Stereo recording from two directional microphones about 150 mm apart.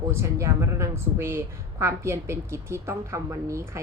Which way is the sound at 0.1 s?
20° right (ahead or behind).